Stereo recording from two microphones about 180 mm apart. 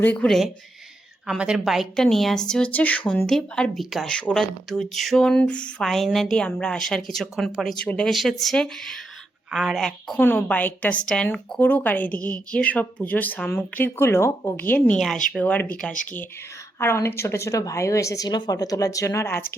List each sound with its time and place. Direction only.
0.0 s a woman's voice: 5° left (ahead or behind)